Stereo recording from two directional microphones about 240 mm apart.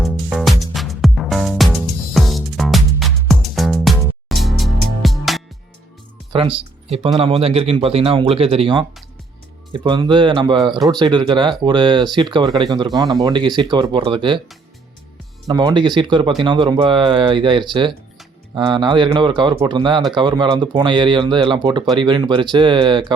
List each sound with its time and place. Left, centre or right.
0.0 s music: centre
7.2 s speech: right
15.4 s speech: centre